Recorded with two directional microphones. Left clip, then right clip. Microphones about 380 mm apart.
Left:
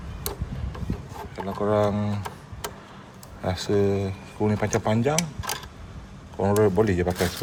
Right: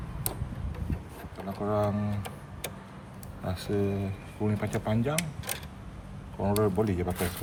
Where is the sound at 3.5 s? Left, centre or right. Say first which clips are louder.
Left 8 dB; centre.